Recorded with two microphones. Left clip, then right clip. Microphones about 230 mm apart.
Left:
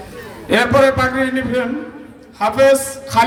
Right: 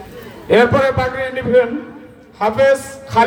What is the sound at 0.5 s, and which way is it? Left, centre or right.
A man's voice, left.